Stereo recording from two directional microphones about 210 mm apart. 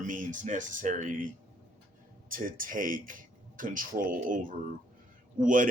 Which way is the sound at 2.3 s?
40° right (ahead or behind).